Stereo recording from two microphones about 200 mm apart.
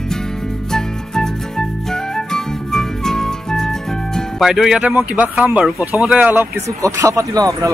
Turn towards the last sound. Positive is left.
turn(degrees=-15)  # may be behind; listen again after turning